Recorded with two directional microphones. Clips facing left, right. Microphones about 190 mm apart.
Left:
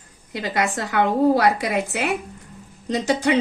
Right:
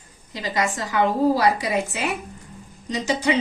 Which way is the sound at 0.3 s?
60° left (ahead or behind).